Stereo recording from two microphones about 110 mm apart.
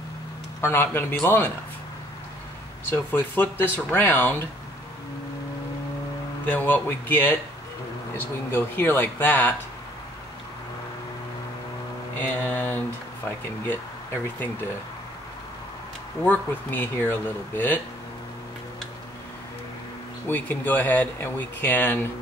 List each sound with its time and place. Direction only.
0.6 s speech: 20° left (ahead or behind)
2.9 s speech: 15° left (ahead or behind)
6.4 s speech: 15° left (ahead or behind)
12.2 s speech: 15° left (ahead or behind)
16.3 s speech: 20° left (ahead or behind)
20.2 s speech: 15° left (ahead or behind)